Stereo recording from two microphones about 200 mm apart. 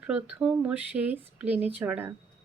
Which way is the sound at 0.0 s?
5° right (ahead or behind).